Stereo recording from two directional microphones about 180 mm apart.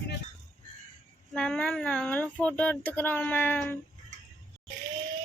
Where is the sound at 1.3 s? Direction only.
5° left (ahead or behind).